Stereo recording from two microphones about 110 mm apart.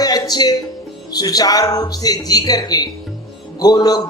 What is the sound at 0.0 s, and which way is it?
Music, 35° left (ahead or behind).